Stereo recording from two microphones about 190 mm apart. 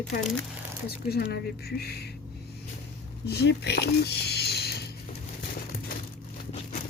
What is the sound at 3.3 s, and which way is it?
Speech, 60° left (ahead or behind).